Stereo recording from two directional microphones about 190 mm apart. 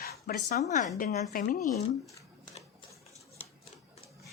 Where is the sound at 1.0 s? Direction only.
45° left (ahead or behind).